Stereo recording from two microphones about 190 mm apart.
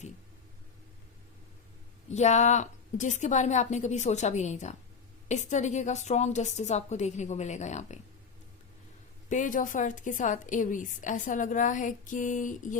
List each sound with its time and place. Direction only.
2.0 s a woman's voice: 35° left (ahead or behind)
9.3 s a woman's voice: 40° left (ahead or behind)